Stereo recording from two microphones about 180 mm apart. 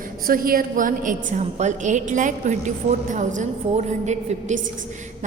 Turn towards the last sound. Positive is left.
turn(degrees=-40)  # may be behind; listen again after turning